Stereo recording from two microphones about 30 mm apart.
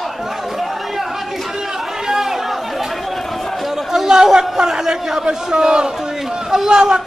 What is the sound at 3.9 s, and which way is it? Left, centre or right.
Chatter, centre.